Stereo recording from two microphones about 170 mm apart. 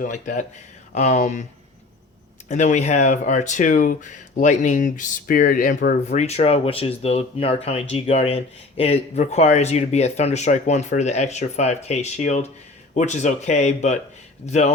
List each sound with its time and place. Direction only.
0.0 s speech: 50° left (ahead or behind)
2.5 s speech: 45° left (ahead or behind)